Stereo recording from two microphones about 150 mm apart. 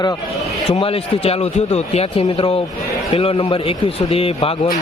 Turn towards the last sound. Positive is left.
turn(degrees=40)  # may be behind; listen again after turning